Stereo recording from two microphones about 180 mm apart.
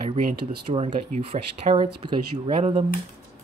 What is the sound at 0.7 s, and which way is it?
Speech, 30° right (ahead or behind).